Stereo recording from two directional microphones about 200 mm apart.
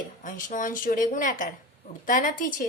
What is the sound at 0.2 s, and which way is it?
A woman's voice, 40° left (ahead or behind).